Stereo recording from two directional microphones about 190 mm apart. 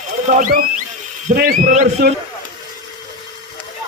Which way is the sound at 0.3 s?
45° right (ahead or behind).